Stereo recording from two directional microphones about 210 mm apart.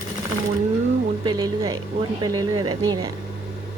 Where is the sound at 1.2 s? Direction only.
20° right (ahead or behind).